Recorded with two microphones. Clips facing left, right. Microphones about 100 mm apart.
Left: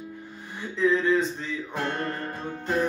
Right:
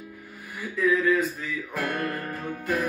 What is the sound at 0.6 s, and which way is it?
Music, 25° left (ahead or behind).